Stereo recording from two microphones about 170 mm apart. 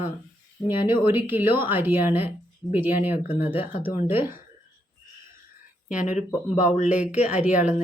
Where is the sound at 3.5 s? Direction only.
10° right (ahead or behind).